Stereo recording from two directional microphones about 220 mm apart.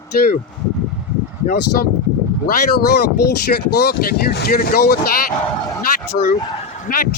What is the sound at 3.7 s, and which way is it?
Speech, 45° left (ahead or behind).